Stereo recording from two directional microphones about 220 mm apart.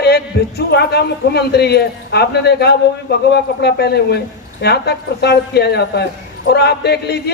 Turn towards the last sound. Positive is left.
turn(degrees=45)  # may be behind; listen again after turning